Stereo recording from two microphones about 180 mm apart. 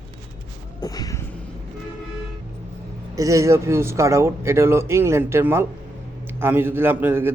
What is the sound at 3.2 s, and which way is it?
A man's voice, 15° right (ahead or behind).